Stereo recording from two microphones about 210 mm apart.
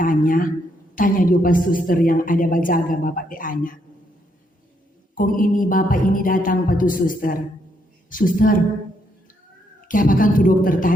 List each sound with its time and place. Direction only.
0.0 s a woman's voice: 40° left (ahead or behind)
5.1 s a woman's voice: 40° left (ahead or behind)
9.9 s a woman's voice: 40° left (ahead or behind)